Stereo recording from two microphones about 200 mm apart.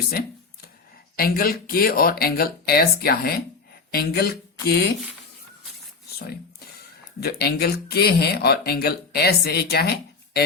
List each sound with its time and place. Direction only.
0.1 s a sound: 50° left (ahead or behind)
1.1 s speech: 50° left (ahead or behind)
7.2 s speech: 55° left (ahead or behind)